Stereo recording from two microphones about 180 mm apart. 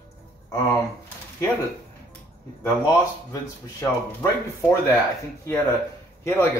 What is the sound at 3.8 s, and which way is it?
Speech, 15° left (ahead or behind).